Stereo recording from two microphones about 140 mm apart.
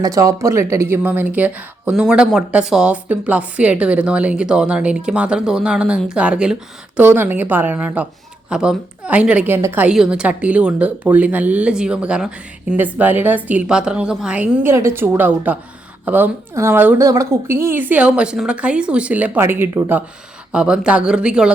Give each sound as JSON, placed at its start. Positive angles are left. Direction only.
{"t": 0.0, "sound": "speech", "side_deg": -25}
{"t": 9.8, "sound": "speech", "side_deg": -5}